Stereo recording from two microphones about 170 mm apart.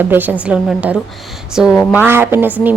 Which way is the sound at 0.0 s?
10° right (ahead or behind).